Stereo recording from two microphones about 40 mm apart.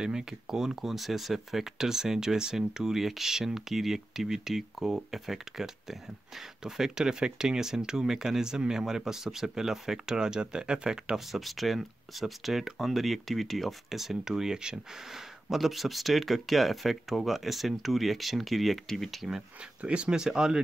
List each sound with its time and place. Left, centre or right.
0.0 s speech: centre
11.1 s speech: centre
15.5 s speech: centre
19.8 s speech: right